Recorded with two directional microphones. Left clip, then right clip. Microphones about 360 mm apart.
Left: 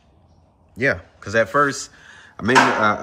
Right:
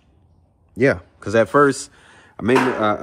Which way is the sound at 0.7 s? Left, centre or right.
Centre.